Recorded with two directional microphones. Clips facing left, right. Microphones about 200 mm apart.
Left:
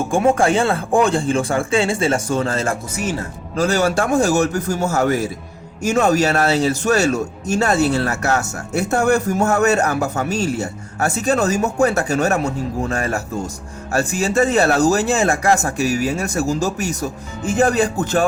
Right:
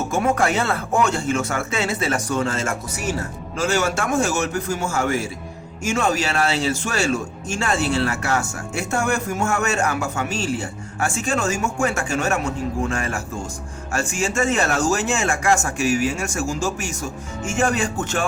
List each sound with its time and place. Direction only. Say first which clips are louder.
0.1 s speech: left 5 dB; 30° left (ahead or behind)